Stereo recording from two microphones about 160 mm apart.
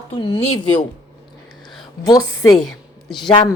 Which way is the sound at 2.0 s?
25° left (ahead or behind).